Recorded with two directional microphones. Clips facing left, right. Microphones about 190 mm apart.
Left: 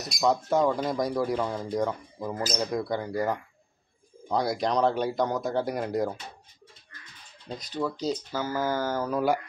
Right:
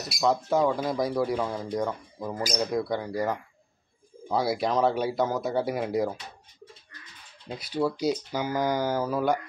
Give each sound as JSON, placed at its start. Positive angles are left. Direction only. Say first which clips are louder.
{"t": 0.1, "sound": "speech", "louder": "even", "side_deg": 0}
{"t": 2.4, "sound": "speech", "louder": "right 2 dB", "side_deg": -10}
{"t": 2.7, "sound": "speech", "louder": "right 1 dB", "side_deg": 0}
{"t": 7.4, "sound": "speech", "louder": "right 3 dB", "side_deg": -10}